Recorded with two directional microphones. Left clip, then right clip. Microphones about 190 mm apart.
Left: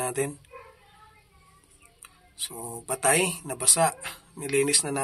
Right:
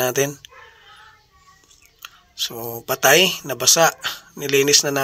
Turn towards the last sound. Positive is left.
turn(degrees=-25)  # may be behind; listen again after turning